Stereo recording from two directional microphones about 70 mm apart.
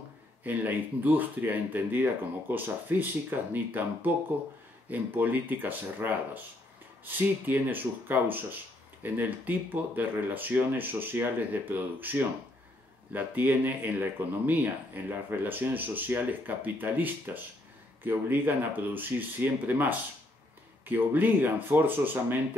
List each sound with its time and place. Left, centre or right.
0.4 s speech: right